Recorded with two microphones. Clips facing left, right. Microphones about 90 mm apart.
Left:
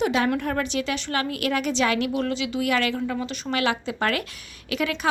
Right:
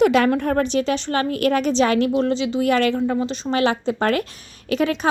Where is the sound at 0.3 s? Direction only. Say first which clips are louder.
Right 6 dB; 40° right (ahead or behind).